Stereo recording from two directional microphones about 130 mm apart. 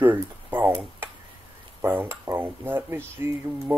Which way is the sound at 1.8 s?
15° right (ahead or behind).